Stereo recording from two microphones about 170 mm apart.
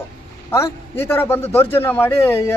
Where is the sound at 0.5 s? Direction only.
15° left (ahead or behind).